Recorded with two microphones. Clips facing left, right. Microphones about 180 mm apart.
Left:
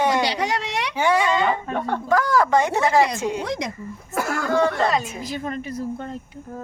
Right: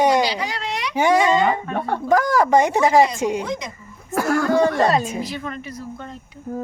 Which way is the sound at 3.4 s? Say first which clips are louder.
Left 1 dB; 70° left (ahead or behind).